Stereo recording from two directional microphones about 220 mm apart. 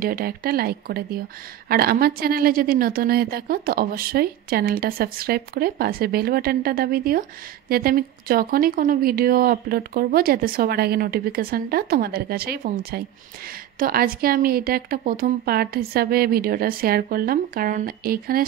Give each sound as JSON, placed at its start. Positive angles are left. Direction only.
{"t": 0.0, "sound": "a woman's voice", "side_deg": -40}